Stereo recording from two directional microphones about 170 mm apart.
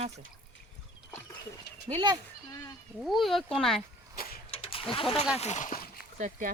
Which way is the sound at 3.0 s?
Centre (ahead or behind).